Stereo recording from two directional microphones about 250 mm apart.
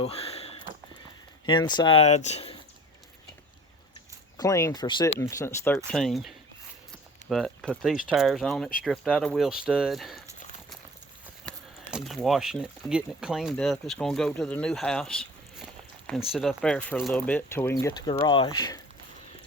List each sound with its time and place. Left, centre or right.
0.0 s a sound: left
1.5 s speech: centre
4.4 s speech: centre
11.4 s speech: centre